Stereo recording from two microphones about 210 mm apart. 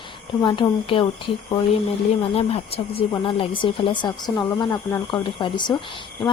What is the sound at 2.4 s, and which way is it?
Speech, 30° left (ahead or behind).